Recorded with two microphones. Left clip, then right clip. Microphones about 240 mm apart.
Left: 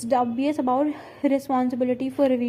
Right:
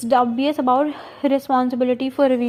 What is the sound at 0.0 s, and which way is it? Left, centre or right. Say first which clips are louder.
A woman's voice: right 5 dB; centre.